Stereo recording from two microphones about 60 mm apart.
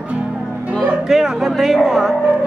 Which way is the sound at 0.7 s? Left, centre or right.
Centre.